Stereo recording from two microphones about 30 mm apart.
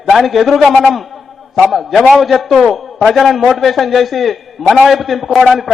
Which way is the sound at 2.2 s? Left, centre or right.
Centre.